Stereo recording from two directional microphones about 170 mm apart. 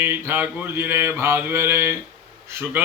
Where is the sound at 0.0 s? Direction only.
15° right (ahead or behind).